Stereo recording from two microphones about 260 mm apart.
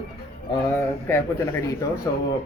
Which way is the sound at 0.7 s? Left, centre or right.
Centre.